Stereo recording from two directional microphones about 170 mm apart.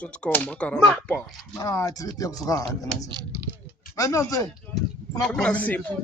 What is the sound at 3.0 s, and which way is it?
Speech, 25° right (ahead or behind).